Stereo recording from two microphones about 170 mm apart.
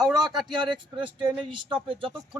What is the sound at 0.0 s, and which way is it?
Speech, 25° right (ahead or behind).